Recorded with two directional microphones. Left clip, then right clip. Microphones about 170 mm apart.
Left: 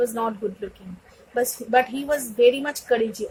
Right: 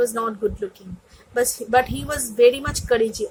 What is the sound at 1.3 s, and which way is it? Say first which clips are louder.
A woman's voice: right 2 dB; 50° right (ahead or behind).